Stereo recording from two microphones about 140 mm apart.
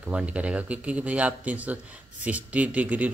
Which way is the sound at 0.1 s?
10° right (ahead or behind).